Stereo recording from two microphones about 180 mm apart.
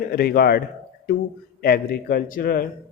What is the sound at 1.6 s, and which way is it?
Speech, 55° left (ahead or behind).